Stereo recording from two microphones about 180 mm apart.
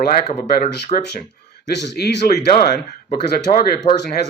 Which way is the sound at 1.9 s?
60° left (ahead or behind).